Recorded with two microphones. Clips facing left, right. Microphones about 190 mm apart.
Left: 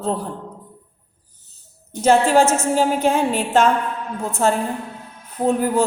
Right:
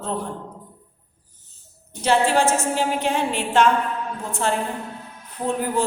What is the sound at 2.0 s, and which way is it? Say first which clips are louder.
A woman's voice: left 4 dB; 45° left (ahead or behind).